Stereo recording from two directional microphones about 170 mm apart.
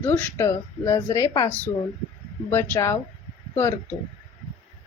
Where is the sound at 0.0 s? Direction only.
15° left (ahead or behind).